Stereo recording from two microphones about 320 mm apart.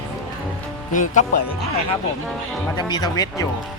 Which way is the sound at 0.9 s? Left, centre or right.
Left.